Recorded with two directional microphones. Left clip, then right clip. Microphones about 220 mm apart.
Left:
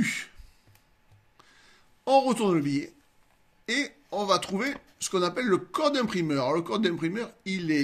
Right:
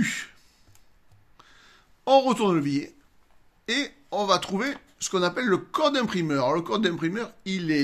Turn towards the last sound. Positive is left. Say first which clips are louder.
# right 2 dB
turn(degrees=-15)  # may be behind; listen again after turning